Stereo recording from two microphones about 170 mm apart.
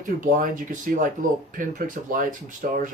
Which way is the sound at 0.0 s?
50° right (ahead or behind).